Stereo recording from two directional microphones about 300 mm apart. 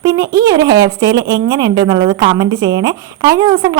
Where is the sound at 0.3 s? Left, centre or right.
Centre.